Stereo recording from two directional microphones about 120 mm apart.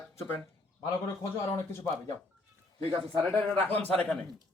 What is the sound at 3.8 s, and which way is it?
Speech, 15° left (ahead or behind).